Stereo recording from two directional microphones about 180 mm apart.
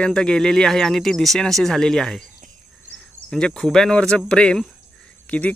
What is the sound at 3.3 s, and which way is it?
Speech, 5° left (ahead or behind).